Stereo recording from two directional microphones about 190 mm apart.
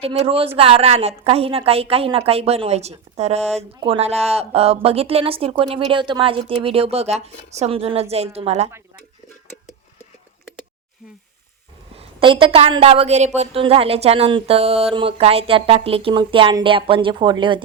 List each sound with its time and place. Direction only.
0.0 s speech: 30° right (ahead or behind)
11.9 s a woman's voice: 25° right (ahead or behind)